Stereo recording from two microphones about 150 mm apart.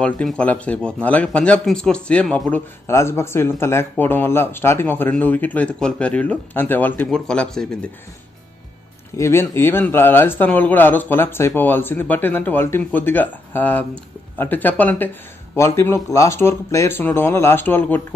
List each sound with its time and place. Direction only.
0.0 s speech: 5° left (ahead or behind)
9.1 s speech: 20° left (ahead or behind)